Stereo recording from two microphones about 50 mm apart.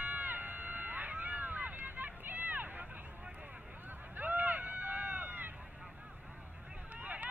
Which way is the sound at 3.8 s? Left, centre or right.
Right.